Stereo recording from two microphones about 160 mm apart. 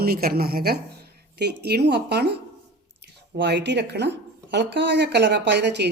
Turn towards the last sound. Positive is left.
turn(degrees=-90)